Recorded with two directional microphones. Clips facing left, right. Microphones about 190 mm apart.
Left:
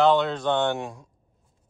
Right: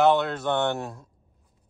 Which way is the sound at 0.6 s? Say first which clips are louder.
Left 1 dB; 15° left (ahead or behind).